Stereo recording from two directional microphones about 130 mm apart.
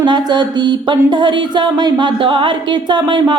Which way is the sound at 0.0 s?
35° right (ahead or behind).